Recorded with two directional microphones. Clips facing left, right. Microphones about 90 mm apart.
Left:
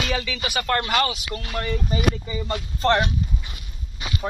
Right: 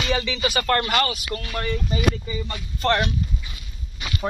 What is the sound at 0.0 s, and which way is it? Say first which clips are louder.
Speech: right 3 dB; centre (ahead or behind).